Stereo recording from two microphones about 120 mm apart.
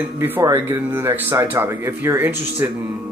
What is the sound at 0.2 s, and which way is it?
Speech, 20° right (ahead or behind).